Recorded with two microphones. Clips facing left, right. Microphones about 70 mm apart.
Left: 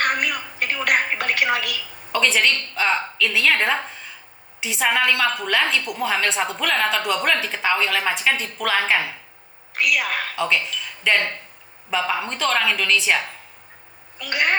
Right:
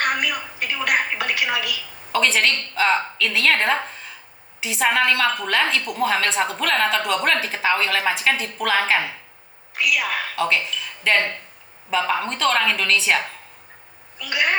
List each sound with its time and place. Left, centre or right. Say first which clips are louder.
0.0 s a sound: even; left
2.1 s speech: even; centre
9.7 s a woman's voice: even; left
10.3 s speech: right 1 dB; centre
10.8 s a sound: even; centre
11.9 s speech: right 2 dB; centre
14.2 s a woman's voice: even; left